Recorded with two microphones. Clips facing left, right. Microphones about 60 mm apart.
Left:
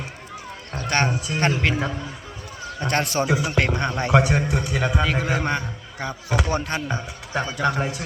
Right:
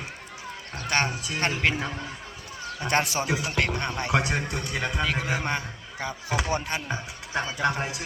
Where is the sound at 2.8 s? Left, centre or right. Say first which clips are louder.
Left 3 dB; centre.